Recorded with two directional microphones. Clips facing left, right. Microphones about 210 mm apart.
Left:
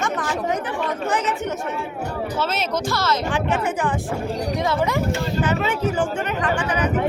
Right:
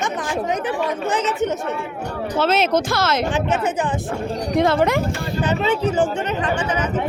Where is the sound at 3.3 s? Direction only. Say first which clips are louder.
Right 2 dB; 20° right (ahead or behind).